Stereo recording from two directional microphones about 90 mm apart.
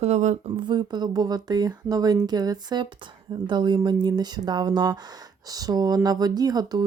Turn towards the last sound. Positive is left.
turn(degrees=-50)  # may be behind; listen again after turning